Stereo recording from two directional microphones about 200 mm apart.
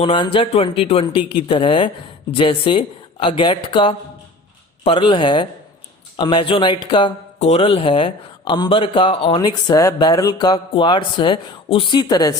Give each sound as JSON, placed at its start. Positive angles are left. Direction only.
{"t": 0.0, "sound": "speech", "side_deg": 25}